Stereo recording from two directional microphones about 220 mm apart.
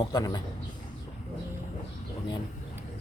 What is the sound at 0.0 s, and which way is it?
Speech, 20° left (ahead or behind).